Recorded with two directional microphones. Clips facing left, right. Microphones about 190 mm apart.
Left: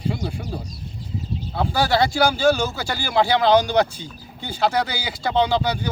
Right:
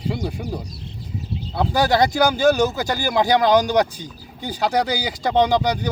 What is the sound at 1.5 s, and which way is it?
Speech, 15° right (ahead or behind).